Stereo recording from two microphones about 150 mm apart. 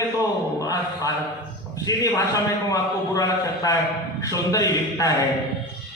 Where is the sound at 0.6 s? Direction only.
20° left (ahead or behind).